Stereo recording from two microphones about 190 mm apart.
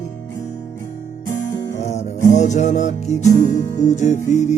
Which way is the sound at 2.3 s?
40° left (ahead or behind).